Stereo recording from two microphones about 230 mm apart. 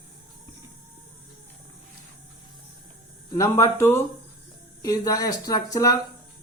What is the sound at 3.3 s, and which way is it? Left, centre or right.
A man's voice, centre.